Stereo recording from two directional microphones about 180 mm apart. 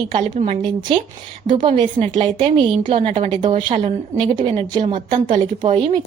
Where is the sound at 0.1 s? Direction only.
40° right (ahead or behind).